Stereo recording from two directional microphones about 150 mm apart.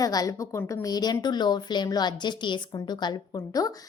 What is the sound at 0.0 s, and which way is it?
A woman's voice, 25° left (ahead or behind).